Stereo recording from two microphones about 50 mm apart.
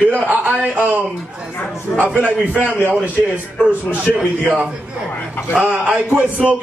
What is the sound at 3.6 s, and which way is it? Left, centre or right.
Speech, right.